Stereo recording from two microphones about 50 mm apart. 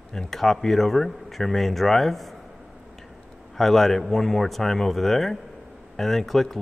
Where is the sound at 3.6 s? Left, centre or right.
Centre.